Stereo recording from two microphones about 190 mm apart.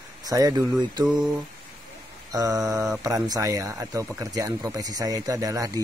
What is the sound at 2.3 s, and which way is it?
Speech, 20° right (ahead or behind).